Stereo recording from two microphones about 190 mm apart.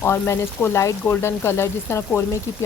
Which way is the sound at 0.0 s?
10° left (ahead or behind).